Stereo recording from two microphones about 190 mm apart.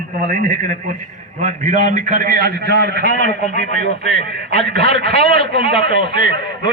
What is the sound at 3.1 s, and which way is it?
Speech, 40° left (ahead or behind).